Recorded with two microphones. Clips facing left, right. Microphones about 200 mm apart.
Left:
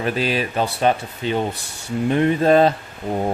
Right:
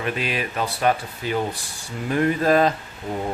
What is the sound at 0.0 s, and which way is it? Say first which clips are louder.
Speech: left 4 dB; 35° left (ahead or behind).